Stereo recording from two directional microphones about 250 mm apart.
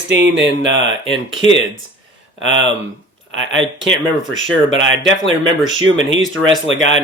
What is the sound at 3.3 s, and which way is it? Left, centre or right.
Speech, right.